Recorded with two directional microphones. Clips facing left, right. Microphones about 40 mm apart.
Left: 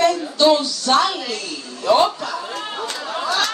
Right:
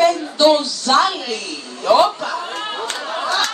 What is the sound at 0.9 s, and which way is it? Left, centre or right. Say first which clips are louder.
Music: right 2 dB; right.